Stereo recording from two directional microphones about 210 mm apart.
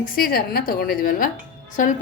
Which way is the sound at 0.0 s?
45° left (ahead or behind).